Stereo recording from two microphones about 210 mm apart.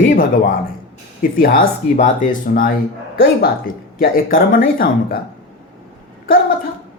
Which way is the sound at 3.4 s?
45° left (ahead or behind).